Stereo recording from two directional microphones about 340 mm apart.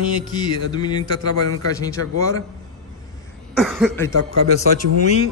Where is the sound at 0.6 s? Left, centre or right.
Centre.